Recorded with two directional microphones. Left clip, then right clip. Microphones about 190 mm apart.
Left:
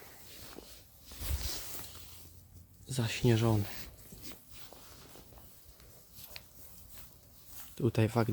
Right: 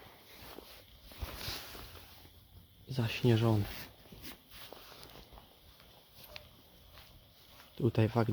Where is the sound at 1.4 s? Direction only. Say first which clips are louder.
Right 1 dB; 20° right (ahead or behind).